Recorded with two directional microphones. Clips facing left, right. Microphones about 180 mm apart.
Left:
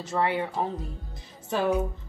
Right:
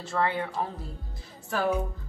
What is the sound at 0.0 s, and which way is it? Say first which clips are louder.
Speech: left 2 dB; 20° left (ahead or behind).